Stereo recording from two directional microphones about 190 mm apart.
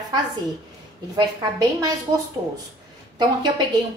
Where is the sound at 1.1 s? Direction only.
20° right (ahead or behind).